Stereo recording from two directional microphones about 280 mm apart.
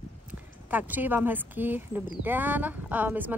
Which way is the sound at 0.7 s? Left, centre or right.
Centre.